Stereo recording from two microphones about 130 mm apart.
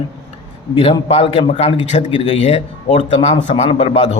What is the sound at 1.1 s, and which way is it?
Speech, 50° left (ahead or behind).